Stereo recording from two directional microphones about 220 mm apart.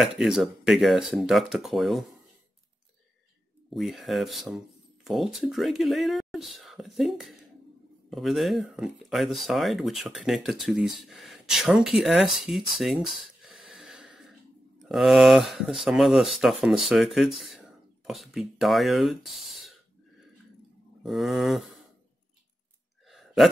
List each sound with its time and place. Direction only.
0.0 s speech: centre (ahead or behind)
3.7 s speech: centre (ahead or behind)
21.0 s speech: centre (ahead or behind)
23.0 s a sound: centre (ahead or behind)